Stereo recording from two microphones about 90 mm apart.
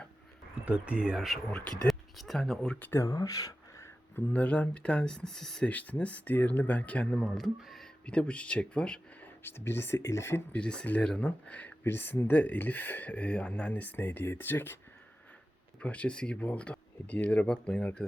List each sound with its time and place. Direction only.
0.6 s speech: 15° right (ahead or behind)
1.5 s speech: 10° left (ahead or behind)
3.0 s speech: 40° left (ahead or behind)
4.1 s speech: 15° left (ahead or behind)
7.2 s speech: 5° left (ahead or behind)
8.0 s speech: 10° left (ahead or behind)
9.4 s speech: 25° left (ahead or behind)
10.5 s speech: 10° left (ahead or behind)
15.8 s speech: 15° left (ahead or behind)